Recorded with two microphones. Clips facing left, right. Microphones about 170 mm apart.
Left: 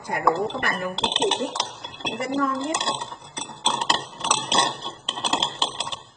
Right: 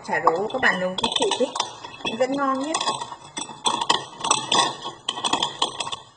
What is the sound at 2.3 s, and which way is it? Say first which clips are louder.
Speech: right 1 dB; 50° right (ahead or behind).